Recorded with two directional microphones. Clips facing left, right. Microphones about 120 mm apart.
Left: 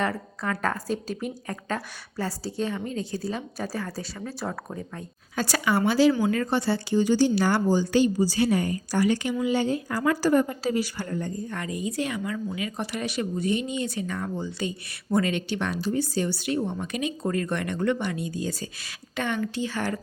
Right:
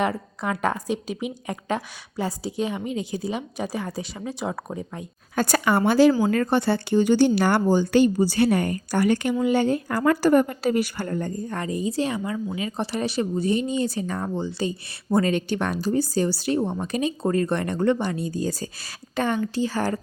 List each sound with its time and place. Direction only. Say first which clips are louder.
0.1 s a woman's voice: right 2 dB; 20° right (ahead or behind)
2.6 s a woman's voice: right 2 dB; 5° right (ahead or behind)
5.3 s a woman's voice: right 4 dB; 50° right (ahead or behind)